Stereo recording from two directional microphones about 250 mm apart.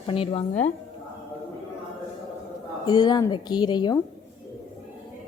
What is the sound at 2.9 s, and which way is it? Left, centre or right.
A woman's voice, centre.